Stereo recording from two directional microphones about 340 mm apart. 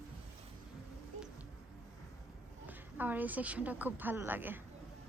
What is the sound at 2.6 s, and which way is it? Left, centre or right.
A woman's voice, centre.